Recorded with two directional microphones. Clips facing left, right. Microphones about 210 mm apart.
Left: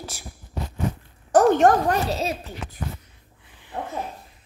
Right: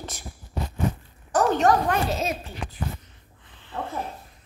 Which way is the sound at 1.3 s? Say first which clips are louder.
Left 4 dB; 50° left (ahead or behind).